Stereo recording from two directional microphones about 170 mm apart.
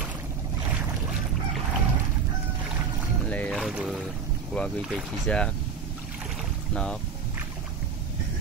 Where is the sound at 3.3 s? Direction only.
5° left (ahead or behind).